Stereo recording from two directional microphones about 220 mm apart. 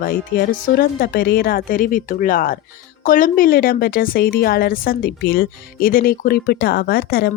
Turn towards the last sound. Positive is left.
turn(degrees=45)  # may be behind; listen again after turning